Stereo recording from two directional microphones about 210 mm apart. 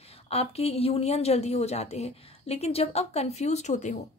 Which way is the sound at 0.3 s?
30° left (ahead or behind).